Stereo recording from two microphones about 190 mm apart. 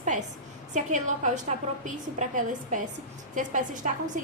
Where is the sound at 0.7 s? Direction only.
40° right (ahead or behind).